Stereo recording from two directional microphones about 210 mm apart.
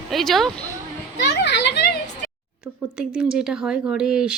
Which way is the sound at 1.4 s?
55° left (ahead or behind).